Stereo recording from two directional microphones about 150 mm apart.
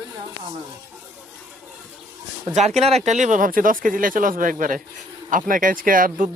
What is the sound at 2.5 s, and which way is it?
Speech, 50° right (ahead or behind).